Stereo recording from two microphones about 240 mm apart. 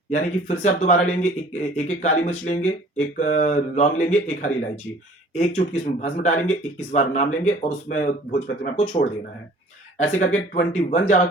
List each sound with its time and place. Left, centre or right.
0.1 s speech: left